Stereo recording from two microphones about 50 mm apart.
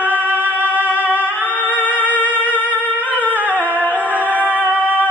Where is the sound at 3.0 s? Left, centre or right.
Left.